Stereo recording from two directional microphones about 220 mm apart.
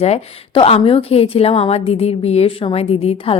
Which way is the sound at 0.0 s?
25° left (ahead or behind).